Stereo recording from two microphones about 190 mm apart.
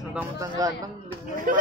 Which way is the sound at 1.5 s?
45° right (ahead or behind).